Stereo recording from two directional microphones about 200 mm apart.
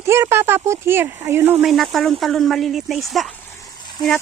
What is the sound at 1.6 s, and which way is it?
Speech, centre (ahead or behind).